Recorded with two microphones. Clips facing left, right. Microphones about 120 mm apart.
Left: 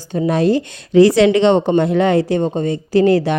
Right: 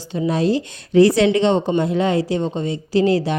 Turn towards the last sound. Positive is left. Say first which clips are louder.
# left 4 dB
turn(degrees=60)  # may be behind; listen again after turning